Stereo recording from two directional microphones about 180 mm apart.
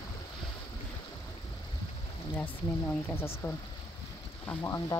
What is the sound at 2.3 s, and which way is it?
Speech, 10° left (ahead or behind).